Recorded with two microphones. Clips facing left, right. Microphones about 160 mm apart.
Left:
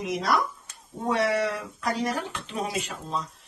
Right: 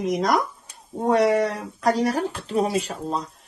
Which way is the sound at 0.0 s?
40° right (ahead or behind).